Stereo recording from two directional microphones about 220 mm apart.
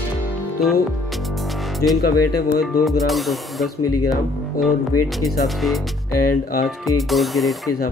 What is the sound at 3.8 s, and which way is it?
Speech, 90° left.